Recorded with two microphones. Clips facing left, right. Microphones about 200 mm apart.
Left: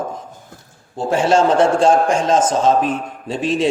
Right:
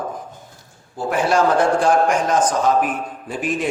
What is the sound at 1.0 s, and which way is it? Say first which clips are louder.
A man's voice: left 3 dB; 25° left (ahead or behind).